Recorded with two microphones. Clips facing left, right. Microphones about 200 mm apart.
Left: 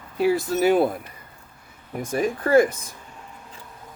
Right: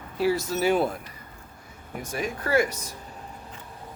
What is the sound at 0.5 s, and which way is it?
Speech, 55° left (ahead or behind).